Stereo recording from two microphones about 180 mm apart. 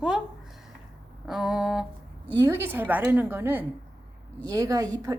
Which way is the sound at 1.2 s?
5° right (ahead or behind).